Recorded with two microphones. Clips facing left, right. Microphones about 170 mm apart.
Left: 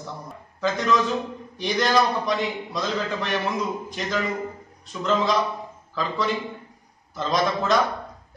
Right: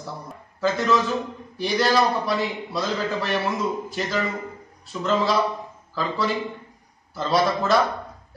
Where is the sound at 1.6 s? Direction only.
5° right (ahead or behind).